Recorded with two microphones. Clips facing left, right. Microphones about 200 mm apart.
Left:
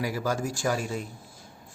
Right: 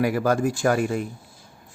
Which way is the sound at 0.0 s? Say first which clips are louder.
Right 8 dB; 60° right (ahead or behind).